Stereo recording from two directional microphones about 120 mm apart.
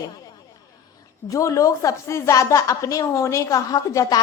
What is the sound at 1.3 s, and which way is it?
A woman's voice, 25° left (ahead or behind).